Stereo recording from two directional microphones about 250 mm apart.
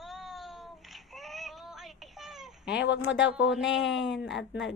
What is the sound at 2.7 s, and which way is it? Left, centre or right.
Speech, left.